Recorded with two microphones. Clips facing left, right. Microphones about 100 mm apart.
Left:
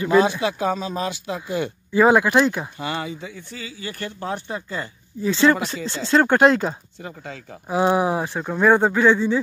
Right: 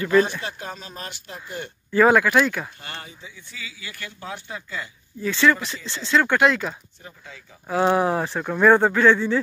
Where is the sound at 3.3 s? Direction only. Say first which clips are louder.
Left 5 dB; 40° left (ahead or behind).